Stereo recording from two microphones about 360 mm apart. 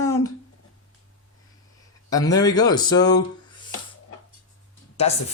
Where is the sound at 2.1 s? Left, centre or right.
Centre.